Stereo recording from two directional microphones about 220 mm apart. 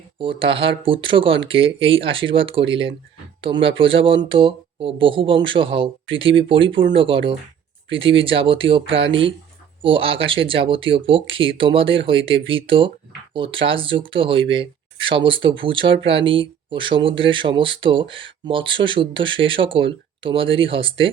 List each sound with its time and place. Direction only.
0.2 s speech: 25° right (ahead or behind)